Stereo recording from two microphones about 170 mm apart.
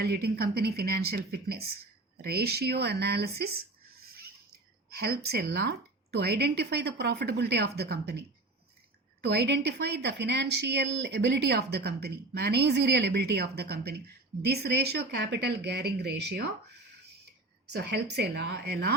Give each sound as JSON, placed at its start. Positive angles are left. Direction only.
{"t": 0.0, "sound": "a woman's voice", "side_deg": -70}
{"t": 4.9, "sound": "a woman's voice", "side_deg": -70}
{"t": 9.2, "sound": "a woman's voice", "side_deg": -80}
{"t": 17.7, "sound": "a woman's voice", "side_deg": -80}